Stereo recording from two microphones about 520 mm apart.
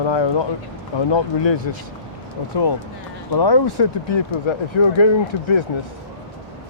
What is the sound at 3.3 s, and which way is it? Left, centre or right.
Speech, left.